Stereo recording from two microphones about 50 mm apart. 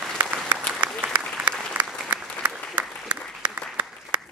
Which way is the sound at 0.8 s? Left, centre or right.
Right.